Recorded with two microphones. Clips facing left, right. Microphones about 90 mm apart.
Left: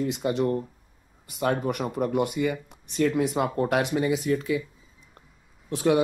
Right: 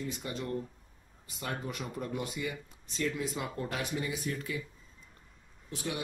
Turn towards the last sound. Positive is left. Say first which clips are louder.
# left 15 dB
turn(degrees=75)  # may be behind; listen again after turning